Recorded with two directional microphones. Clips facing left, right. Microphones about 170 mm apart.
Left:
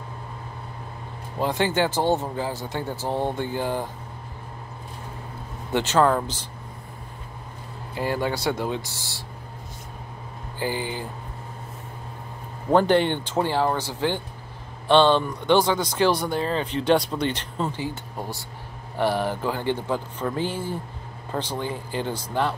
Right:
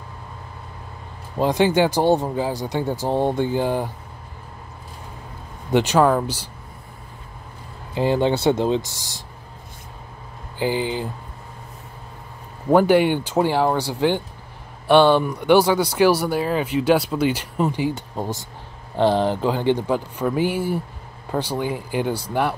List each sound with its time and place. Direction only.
1.4 s speech: 15° right (ahead or behind)
5.7 s speech: 15° right (ahead or behind)
7.9 s speech: 20° right (ahead or behind)
10.6 s speech: 15° right (ahead or behind)
12.7 s speech: 10° right (ahead or behind)